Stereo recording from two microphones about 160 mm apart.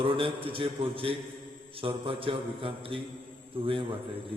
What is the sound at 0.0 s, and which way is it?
A man's voice, 35° right (ahead or behind).